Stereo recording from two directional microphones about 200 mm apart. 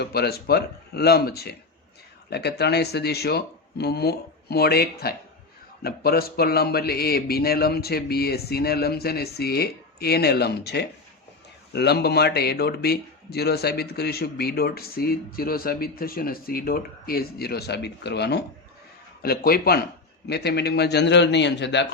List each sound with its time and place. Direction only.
0.0 s a man's voice: 50° left (ahead or behind)